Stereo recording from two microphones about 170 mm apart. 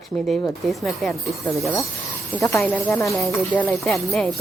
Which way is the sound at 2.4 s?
15° left (ahead or behind).